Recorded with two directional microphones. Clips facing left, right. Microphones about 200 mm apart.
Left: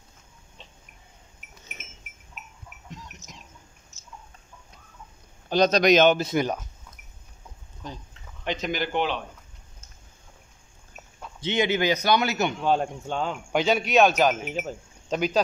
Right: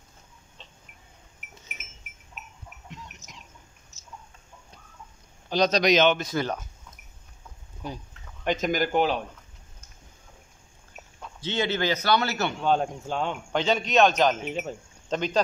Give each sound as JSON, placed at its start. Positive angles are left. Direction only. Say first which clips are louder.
{"t": 5.5, "sound": "a man's voice", "louder": "left 3 dB", "side_deg": 50}
{"t": 6.1, "sound": "speech", "louder": "left 4 dB", "side_deg": 25}
{"t": 7.8, "sound": "speech", "louder": "right 3 dB", "side_deg": -10}
{"t": 8.5, "sound": "speech", "louder": "right 3 dB", "side_deg": -45}
{"t": 11.4, "sound": "a man's voice", "louder": "left 3 dB", "side_deg": 15}
{"t": 12.6, "sound": "speech", "louder": "right 3 dB", "side_deg": 5}
{"t": 13.5, "sound": "a man's voice", "louder": "left 3 dB", "side_deg": 10}